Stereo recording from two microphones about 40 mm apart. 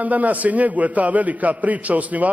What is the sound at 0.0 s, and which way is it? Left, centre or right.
A man's voice, right.